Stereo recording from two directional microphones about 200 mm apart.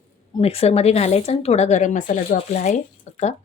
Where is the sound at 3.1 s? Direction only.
35° left (ahead or behind).